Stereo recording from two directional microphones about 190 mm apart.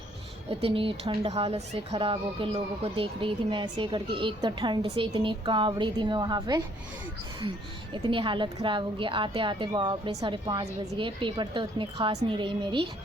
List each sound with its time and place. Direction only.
0.6 s speech: 30° right (ahead or behind)
7.9 s speech: 25° right (ahead or behind)